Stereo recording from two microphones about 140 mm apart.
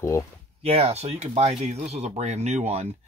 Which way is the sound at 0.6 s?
50° right (ahead or behind).